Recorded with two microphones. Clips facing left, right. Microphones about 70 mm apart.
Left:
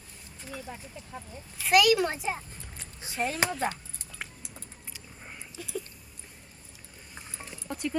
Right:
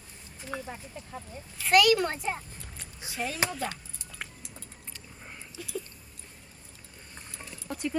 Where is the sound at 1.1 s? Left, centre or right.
Centre.